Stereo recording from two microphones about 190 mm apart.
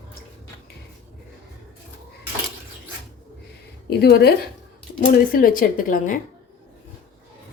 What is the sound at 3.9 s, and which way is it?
A woman's voice, 60° left (ahead or behind).